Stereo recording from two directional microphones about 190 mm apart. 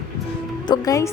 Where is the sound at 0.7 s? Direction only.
15° left (ahead or behind).